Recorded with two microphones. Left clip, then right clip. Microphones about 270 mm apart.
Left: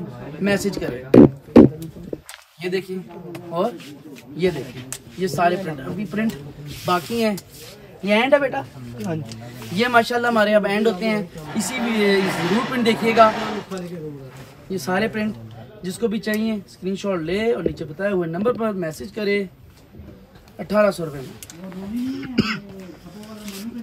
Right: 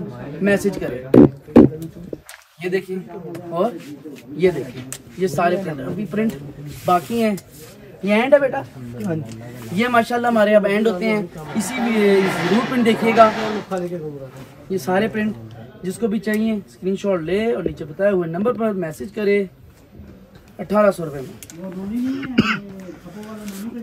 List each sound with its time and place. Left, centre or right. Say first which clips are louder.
0.4 s a man's voice: right 3 dB; centre
1.1 s music: even; right
2.6 s a man's voice: right 2 dB; centre
20.5 s a man's voice: right 2 dB; centre
23.1 s a sound: right 1 dB; centre